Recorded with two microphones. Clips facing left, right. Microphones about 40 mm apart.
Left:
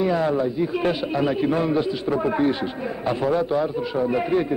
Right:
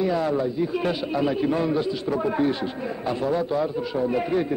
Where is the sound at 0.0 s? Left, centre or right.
Left.